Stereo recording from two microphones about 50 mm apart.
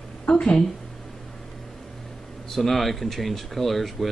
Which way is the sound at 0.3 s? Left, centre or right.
Left.